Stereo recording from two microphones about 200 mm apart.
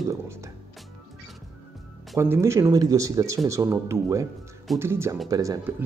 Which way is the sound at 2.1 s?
15° right (ahead or behind).